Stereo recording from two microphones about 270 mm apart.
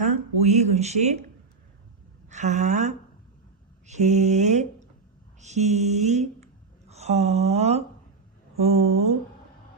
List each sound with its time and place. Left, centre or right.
0.4 s speech: right
2.3 s speech: right